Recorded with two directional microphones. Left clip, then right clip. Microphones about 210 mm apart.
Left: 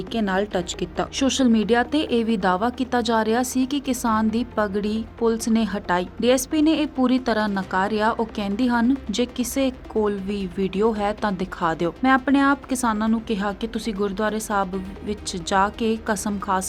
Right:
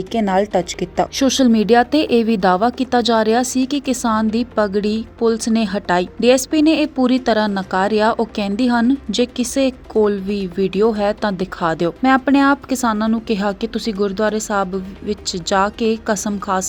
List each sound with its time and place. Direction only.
0.1 s a woman's voice: 20° right (ahead or behind)